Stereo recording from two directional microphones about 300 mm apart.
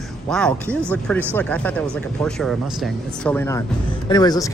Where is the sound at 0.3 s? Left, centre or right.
Centre.